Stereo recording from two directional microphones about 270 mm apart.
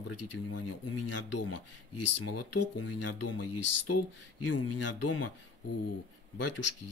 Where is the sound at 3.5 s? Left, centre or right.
Left.